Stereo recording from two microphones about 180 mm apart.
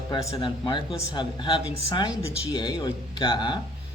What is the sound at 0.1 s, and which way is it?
Speech, 20° left (ahead or behind).